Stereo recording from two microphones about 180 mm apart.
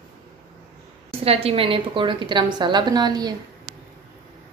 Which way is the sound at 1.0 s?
30° right (ahead or behind).